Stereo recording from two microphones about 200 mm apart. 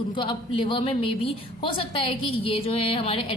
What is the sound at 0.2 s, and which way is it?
A woman's voice, 25° left (ahead or behind).